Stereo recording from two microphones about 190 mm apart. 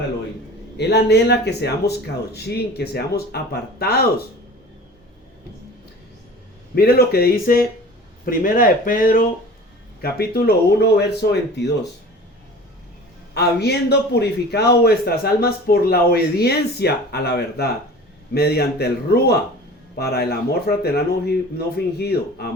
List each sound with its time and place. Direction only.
0.8 s a man's voice: 60° left (ahead or behind)
6.7 s a man's voice: 55° left (ahead or behind)
13.3 s a man's voice: 60° left (ahead or behind)